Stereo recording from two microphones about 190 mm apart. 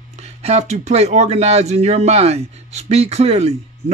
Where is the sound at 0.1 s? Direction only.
35° right (ahead or behind).